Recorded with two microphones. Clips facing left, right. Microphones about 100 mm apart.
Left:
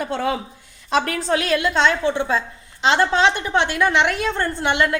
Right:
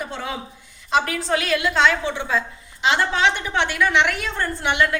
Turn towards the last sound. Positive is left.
turn(degrees=25)  # may be behind; listen again after turning